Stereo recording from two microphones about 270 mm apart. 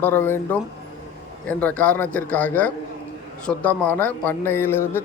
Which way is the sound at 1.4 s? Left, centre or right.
Centre.